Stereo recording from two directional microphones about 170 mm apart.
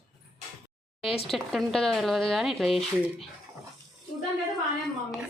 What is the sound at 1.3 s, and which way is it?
Speech, centre (ahead or behind).